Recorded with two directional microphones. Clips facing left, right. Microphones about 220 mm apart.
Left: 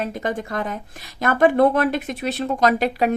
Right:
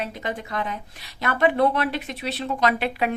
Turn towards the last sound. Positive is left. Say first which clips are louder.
# left 4 dB
turn(degrees=40)  # may be behind; listen again after turning